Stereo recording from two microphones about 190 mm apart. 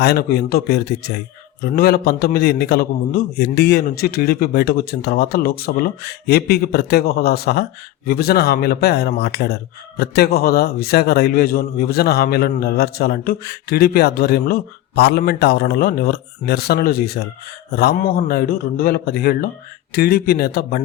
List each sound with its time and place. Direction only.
0.0 s a man's voice: 55° left (ahead or behind)